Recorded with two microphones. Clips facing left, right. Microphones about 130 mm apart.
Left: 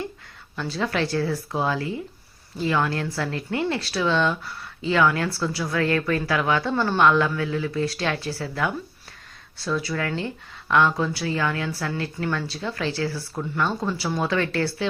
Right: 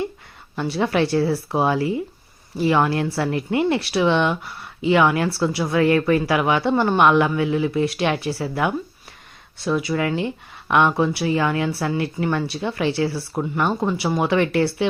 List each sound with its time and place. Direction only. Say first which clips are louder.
0.8 s speech: right 5 dB; 25° right (ahead or behind)